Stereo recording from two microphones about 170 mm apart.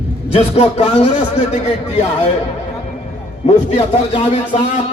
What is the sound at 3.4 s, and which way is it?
Speech, 40° left (ahead or behind).